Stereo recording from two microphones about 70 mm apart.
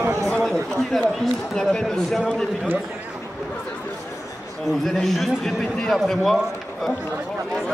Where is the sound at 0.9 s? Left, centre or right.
Centre.